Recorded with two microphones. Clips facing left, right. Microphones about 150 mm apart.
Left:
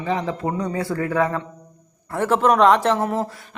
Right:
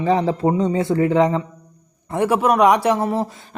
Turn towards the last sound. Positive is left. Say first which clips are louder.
# right 2 dB
turn(degrees=-10)  # may be behind; listen again after turning